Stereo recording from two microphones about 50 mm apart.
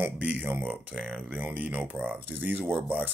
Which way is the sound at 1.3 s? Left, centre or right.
Right.